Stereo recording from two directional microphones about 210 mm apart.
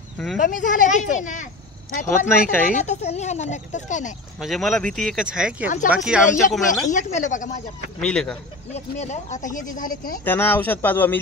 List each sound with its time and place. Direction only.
0.4 s speech: 40° left (ahead or behind)
4.4 s speech: centre (ahead or behind)
6.7 s speech: 35° left (ahead or behind)
8.0 s speech: 5° left (ahead or behind)
8.7 s speech: 35° left (ahead or behind)
10.2 s speech: 10° left (ahead or behind)